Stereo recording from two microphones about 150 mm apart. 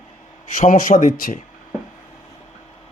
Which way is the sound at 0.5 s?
55° left (ahead or behind).